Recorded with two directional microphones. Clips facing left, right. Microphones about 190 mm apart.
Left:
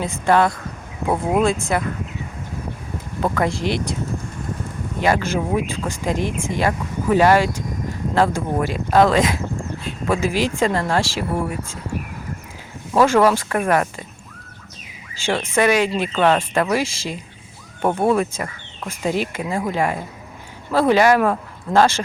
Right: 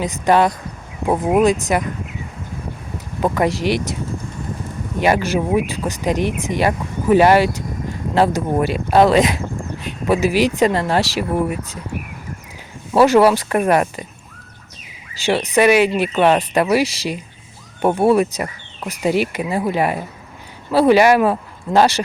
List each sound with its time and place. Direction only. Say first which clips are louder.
0.0 s speech: right 2 dB; 15° right (ahead or behind)
3.3 s speech: right 4 dB; 15° right (ahead or behind)
4.9 s speech: right 3 dB; 15° right (ahead or behind)
12.9 s speech: right 3 dB; 10° right (ahead or behind)
15.5 s speech: right 4 dB; 15° right (ahead or behind)